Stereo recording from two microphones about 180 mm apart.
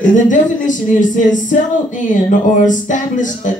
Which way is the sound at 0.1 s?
45° left (ahead or behind).